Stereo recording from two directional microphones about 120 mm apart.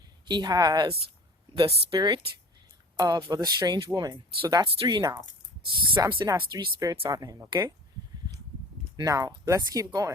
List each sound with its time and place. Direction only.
0.3 s speech: 35° right (ahead or behind)
1.5 s speech: 50° right (ahead or behind)
2.0 s speech: 40° right (ahead or behind)
9.0 s speech: 30° right (ahead or behind)